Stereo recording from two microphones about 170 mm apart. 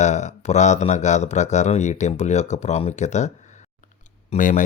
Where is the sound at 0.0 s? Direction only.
45° left (ahead or behind).